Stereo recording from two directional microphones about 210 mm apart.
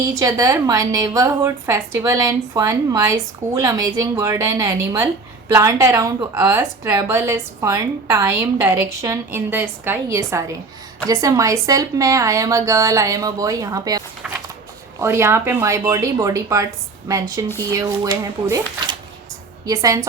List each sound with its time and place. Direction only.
0.0 s speech: 15° right (ahead or behind)